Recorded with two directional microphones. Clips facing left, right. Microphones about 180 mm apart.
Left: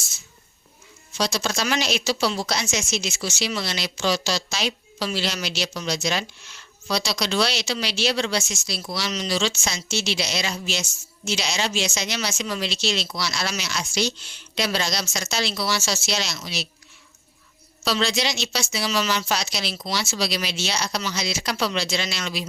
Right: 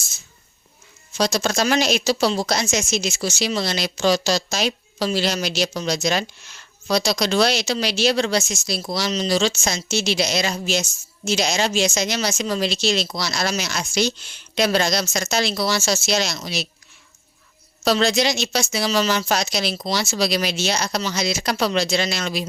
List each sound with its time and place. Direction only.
1.1 s speech: 45° right (ahead or behind)
17.8 s speech: 50° right (ahead or behind)